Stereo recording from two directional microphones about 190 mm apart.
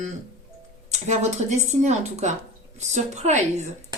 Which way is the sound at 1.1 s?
35° right (ahead or behind).